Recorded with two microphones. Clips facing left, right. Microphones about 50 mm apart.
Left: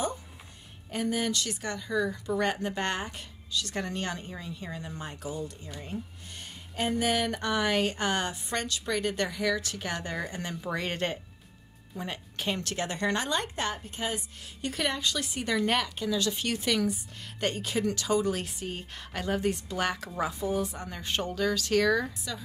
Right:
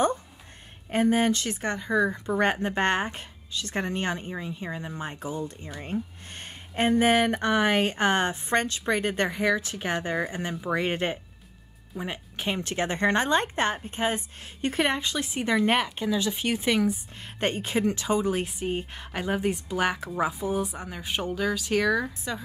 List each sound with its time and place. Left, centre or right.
0.8 s a woman's voice: right; by 22.1 s centre